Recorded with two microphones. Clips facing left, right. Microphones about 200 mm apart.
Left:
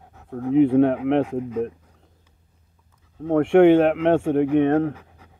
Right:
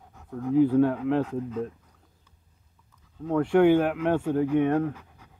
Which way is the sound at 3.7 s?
75° left (ahead or behind).